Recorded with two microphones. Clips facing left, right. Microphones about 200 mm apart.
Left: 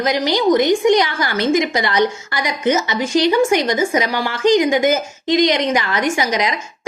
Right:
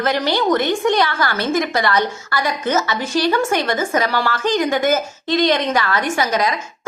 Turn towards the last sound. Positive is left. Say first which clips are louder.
# left 1 dB
turn(degrees=15)  # may be behind; listen again after turning